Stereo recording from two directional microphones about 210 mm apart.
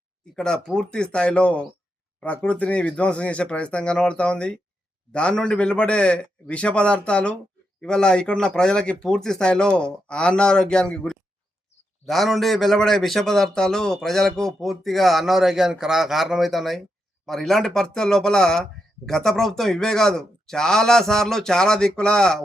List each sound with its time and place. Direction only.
0.3 s speech: 5° left (ahead or behind)